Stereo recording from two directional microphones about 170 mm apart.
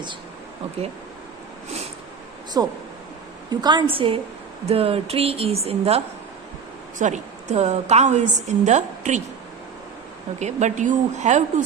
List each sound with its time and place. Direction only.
2.5 s a woman's voice: 20° right (ahead or behind)
7.0 s a woman's voice: 45° right (ahead or behind)
10.4 s a woman's voice: 45° right (ahead or behind)